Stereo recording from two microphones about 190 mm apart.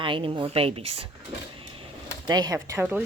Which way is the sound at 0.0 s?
25° right (ahead or behind).